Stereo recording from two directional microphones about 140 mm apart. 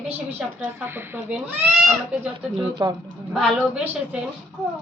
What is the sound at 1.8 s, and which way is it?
Speech, 5° right (ahead or behind).